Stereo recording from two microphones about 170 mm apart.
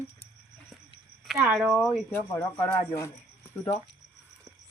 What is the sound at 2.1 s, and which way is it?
Speech, 20° left (ahead or behind).